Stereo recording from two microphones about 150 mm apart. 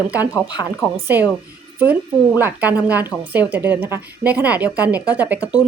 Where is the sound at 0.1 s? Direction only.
10° right (ahead or behind).